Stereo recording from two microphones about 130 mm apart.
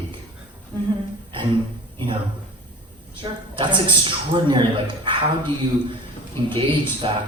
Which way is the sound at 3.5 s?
40° right (ahead or behind).